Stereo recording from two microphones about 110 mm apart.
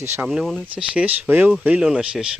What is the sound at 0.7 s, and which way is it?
Speech, 10° right (ahead or behind).